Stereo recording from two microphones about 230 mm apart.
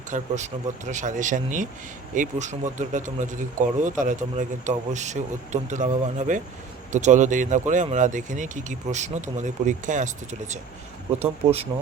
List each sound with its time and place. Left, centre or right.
0.1 s speech: right